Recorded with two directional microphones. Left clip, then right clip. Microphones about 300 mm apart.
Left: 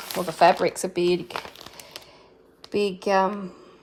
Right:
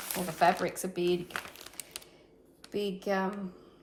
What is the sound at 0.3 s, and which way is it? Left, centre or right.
Speech, centre.